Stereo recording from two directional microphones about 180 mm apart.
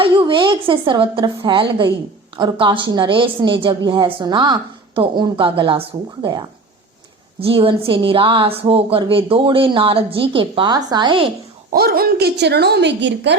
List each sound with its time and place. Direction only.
0.0 s a woman's voice: 30° right (ahead or behind)
7.3 s a woman's voice: 30° right (ahead or behind)
11.7 s a woman's voice: 55° right (ahead or behind); by 13.3 s 75° right (ahead or behind)